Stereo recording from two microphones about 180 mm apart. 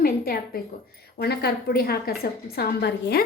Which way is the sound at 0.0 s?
55° left (ahead or behind).